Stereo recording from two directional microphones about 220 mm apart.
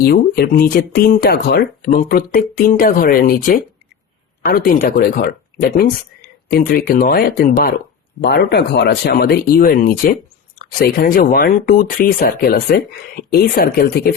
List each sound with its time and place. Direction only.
0.0 s speech: 45° left (ahead or behind)